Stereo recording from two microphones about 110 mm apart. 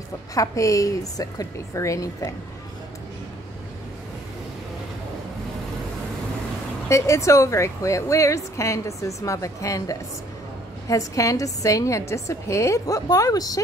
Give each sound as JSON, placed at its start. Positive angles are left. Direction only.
{"t": 0.3, "sound": "a woman's voice", "side_deg": 30}
{"t": 6.9, "sound": "a woman's voice", "side_deg": 30}